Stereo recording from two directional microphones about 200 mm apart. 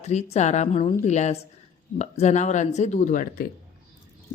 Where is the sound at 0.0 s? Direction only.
35° left (ahead or behind).